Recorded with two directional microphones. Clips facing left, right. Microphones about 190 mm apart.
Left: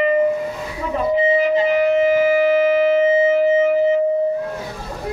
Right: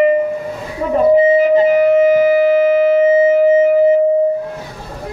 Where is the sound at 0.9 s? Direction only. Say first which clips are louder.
Right 7 dB; 45° right (ahead or behind).